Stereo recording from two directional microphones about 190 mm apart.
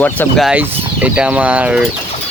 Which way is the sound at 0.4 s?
5° right (ahead or behind).